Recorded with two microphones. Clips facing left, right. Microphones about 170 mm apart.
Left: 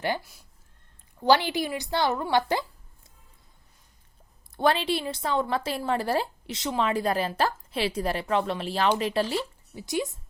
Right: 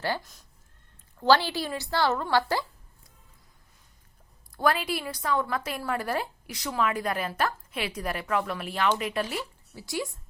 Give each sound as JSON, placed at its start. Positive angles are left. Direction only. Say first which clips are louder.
{"t": 0.0, "sound": "a woman's voice", "louder": "left 2 dB", "side_deg": 15}
{"t": 4.5, "sound": "a woman's voice", "louder": "left 2 dB", "side_deg": 25}